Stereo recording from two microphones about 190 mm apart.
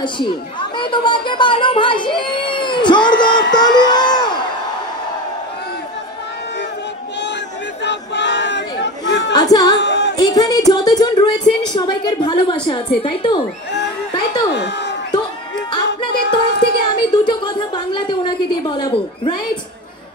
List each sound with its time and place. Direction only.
0.0 s speech: 25° left (ahead or behind)
3.5 s a sound: 20° left (ahead or behind)
7.8 s crowd: 70° left (ahead or behind)
9.3 s music: 20° left (ahead or behind)
9.8 s music: 65° left (ahead or behind)
10.1 s a woman's voice: 20° left (ahead or behind)
14.5 s a sound: 65° left (ahead or behind)
15.7 s music: 25° left (ahead or behind)
16.2 s a sound: 65° left (ahead or behind)
17.0 s a woman's voice: 25° left (ahead or behind)